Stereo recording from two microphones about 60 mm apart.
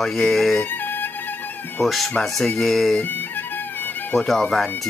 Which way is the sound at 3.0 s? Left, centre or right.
Left.